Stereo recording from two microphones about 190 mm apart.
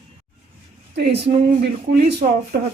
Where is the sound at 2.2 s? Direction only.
45° right (ahead or behind).